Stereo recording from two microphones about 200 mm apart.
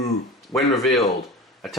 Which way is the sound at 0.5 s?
10° left (ahead or behind).